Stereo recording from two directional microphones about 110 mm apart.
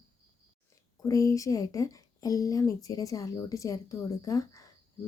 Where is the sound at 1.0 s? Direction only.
30° left (ahead or behind).